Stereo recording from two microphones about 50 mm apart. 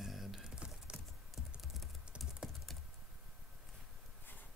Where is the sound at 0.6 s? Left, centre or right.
Centre.